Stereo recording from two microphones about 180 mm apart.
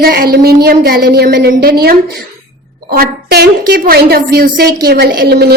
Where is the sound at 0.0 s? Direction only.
55° right (ahead or behind).